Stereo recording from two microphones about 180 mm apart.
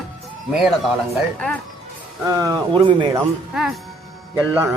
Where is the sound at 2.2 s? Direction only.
15° right (ahead or behind).